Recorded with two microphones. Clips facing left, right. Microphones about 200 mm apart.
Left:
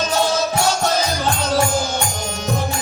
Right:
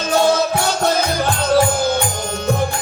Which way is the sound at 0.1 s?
60° right (ahead or behind).